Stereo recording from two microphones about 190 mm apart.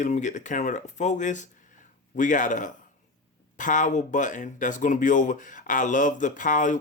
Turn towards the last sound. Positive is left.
turn(degrees=40)  # may be behind; listen again after turning